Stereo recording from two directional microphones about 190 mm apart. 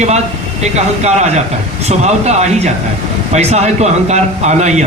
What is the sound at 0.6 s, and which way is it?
A man's voice, 35° right (ahead or behind).